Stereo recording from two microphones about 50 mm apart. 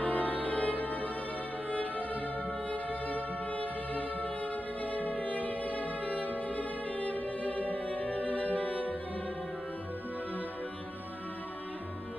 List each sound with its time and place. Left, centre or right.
0.0 s music: left